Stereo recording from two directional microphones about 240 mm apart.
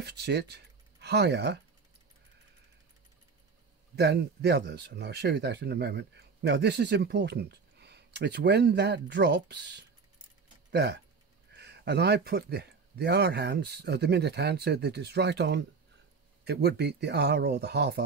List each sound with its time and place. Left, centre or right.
0.0 s speech: right
3.9 s speech: right